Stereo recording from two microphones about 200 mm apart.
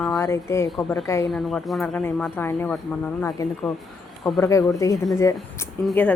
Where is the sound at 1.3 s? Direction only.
Centre (ahead or behind).